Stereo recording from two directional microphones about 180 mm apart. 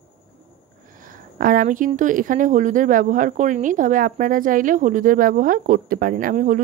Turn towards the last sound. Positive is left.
turn(degrees=-45)  # may be behind; listen again after turning